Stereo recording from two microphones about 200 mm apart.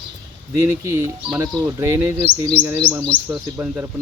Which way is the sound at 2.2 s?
25° left (ahead or behind).